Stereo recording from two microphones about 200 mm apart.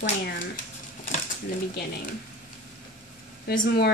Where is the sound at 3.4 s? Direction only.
50° left (ahead or behind).